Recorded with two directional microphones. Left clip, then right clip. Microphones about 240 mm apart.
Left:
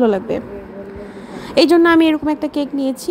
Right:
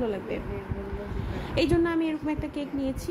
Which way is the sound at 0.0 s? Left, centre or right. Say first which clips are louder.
Left 14 dB; left.